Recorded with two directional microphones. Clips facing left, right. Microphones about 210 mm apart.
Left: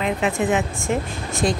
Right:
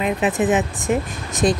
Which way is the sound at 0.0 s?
20° right (ahead or behind).